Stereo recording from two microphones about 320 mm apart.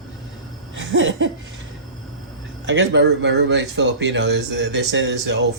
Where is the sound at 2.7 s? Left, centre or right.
Right.